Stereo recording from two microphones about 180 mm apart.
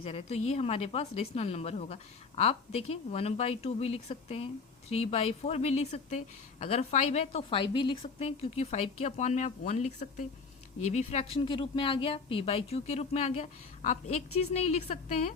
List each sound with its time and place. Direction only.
0.0 s a woman's voice: 35° left (ahead or behind)